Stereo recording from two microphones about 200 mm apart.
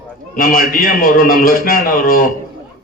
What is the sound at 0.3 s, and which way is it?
A man's voice, 45° left (ahead or behind).